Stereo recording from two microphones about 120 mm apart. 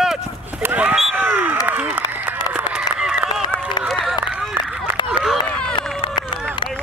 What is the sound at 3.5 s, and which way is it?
Run, 20° right (ahead or behind).